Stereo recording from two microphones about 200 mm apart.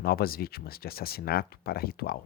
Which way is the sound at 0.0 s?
50° left (ahead or behind).